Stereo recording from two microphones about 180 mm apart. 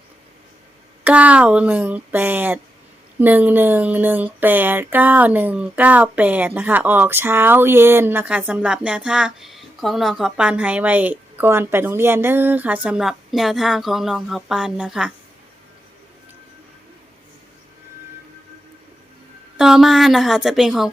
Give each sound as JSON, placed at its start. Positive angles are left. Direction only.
{"t": 1.0, "sound": "speech", "side_deg": -5}
{"t": 19.5, "sound": "a woman's voice", "side_deg": -5}